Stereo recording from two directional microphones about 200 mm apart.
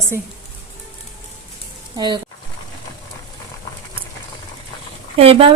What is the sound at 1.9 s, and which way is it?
Speech, 20° right (ahead or behind).